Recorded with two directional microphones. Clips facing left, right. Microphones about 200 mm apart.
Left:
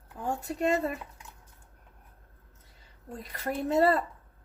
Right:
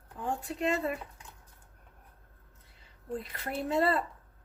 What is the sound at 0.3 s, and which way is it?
Speech, 40° left (ahead or behind).